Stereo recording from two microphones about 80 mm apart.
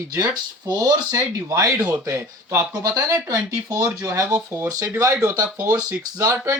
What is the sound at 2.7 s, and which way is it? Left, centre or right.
Speech, right.